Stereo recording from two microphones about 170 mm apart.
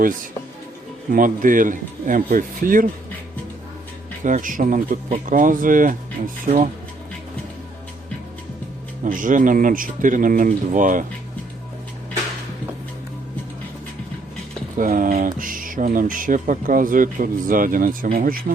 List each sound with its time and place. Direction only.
1.1 s speech: 50° right (ahead or behind)
4.2 s speech: 50° right (ahead or behind)
9.0 s speech: 50° right (ahead or behind)
14.8 s speech: 50° right (ahead or behind)